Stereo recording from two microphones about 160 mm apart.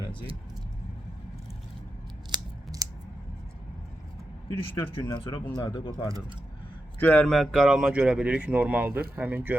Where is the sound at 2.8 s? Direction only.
20° right (ahead or behind).